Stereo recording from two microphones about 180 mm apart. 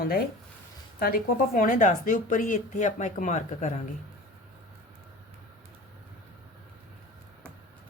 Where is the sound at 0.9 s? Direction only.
55° left (ahead or behind).